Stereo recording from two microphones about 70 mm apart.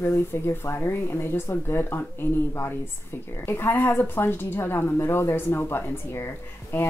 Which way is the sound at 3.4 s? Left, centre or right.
Left.